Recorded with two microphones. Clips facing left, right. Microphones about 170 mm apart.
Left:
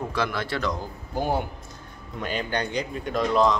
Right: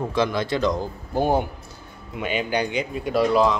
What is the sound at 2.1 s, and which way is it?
Speech, 5° right (ahead or behind).